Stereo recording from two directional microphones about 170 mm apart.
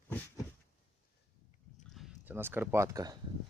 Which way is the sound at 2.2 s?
15° right (ahead or behind).